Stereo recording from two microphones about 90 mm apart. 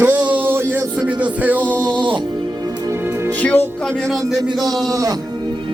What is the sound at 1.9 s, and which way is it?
Music, 60° right (ahead or behind).